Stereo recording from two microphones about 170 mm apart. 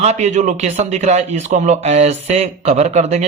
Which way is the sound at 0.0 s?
40° right (ahead or behind).